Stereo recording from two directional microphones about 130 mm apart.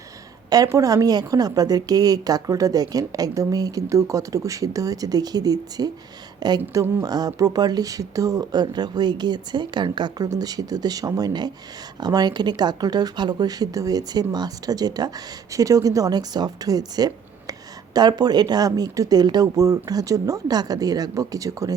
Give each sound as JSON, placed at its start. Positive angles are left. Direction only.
{"t": 0.5, "sound": "a woman's voice", "side_deg": -25}
{"t": 6.6, "sound": "speech", "side_deg": -15}
{"t": 7.0, "sound": "a woman's voice", "side_deg": -30}